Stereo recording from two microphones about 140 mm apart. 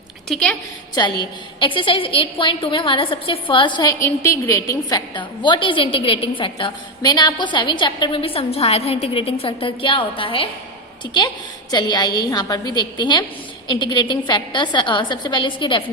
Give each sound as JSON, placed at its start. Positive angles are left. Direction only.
{"t": 0.3, "sound": "a woman's voice", "side_deg": 5}
{"t": 0.9, "sound": "a woman's voice", "side_deg": 35}